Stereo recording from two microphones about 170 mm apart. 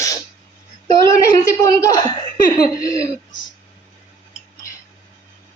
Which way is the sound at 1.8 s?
20° left (ahead or behind).